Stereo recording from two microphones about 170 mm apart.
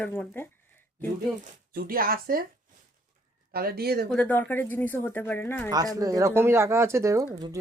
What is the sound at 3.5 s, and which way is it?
Speech, 65° right (ahead or behind).